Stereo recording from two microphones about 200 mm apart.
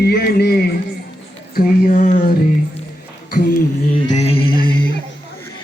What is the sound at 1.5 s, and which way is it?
Speech, 40° left (ahead or behind).